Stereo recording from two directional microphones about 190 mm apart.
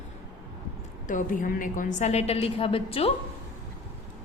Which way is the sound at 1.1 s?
45° left (ahead or behind).